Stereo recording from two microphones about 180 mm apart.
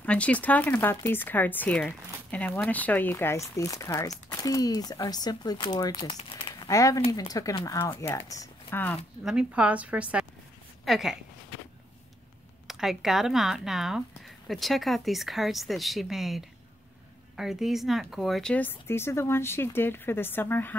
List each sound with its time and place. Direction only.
0.0 s speech: 5° left (ahead or behind); by 6.7 s 30° left (ahead or behind)
6.7 s speech: 20° left (ahead or behind)
9.2 s a woman's voice: 5° right (ahead or behind)
12.6 s speech: centre (ahead or behind)